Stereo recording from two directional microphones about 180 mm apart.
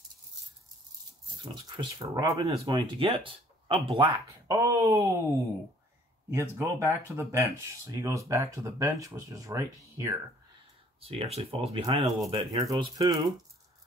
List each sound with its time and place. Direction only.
1.5 s speech: 25° right (ahead or behind)
4.5 s speech: 15° right (ahead or behind)
11.0 s speech: 35° right (ahead or behind)